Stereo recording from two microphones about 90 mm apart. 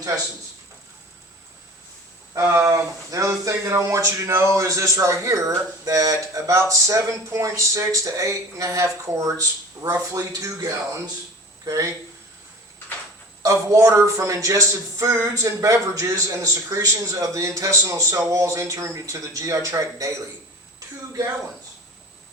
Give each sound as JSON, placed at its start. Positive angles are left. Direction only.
{"t": 2.5, "sound": "speech", "side_deg": -35}
{"t": 13.4, "sound": "speech", "side_deg": -35}